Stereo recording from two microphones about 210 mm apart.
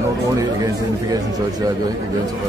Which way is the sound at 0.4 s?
20° right (ahead or behind).